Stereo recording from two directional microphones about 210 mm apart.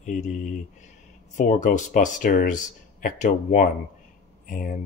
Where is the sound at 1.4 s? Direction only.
35° left (ahead or behind).